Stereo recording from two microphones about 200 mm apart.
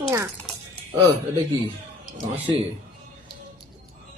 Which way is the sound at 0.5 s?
Centre (ahead or behind).